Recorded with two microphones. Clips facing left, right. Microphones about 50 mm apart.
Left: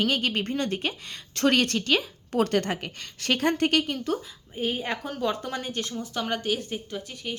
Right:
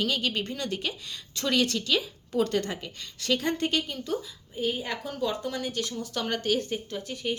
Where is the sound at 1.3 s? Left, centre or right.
Left.